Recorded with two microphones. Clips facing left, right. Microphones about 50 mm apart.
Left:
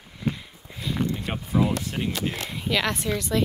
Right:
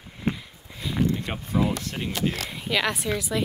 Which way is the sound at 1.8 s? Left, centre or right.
Centre.